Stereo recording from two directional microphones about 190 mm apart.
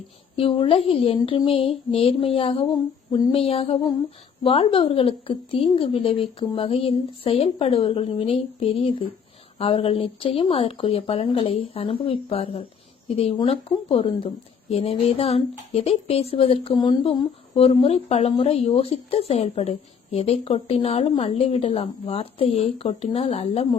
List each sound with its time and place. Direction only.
0.4 s speech: 30° left (ahead or behind)
3.3 s speech: 30° left (ahead or behind)